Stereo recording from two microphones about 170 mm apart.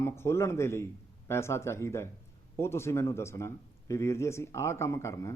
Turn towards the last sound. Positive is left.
turn(degrees=15)  # may be behind; listen again after turning